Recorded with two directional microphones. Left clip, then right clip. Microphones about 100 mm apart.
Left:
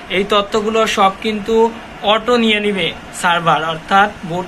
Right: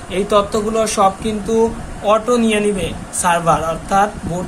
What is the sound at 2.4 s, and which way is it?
Speech, 25° right (ahead or behind).